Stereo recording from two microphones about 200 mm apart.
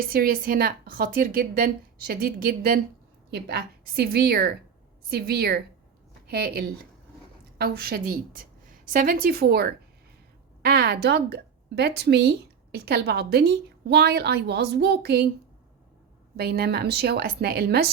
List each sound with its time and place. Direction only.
0.1 s a woman's voice: 50° right (ahead or behind)
16.4 s a woman's voice: 50° right (ahead or behind)